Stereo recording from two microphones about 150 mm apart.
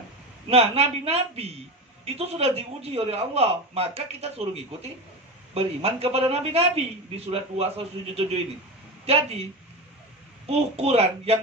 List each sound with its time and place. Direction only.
0.5 s a man's voice: 45° right (ahead or behind)
10.5 s a man's voice: 45° right (ahead or behind)